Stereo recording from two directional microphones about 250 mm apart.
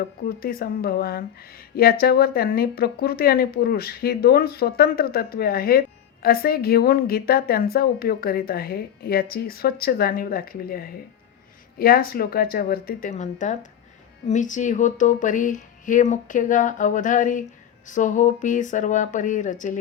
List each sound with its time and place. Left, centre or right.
0.3 s a woman's voice: left